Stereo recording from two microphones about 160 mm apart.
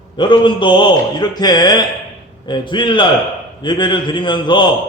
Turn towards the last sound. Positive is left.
turn(degrees=30)  # may be behind; listen again after turning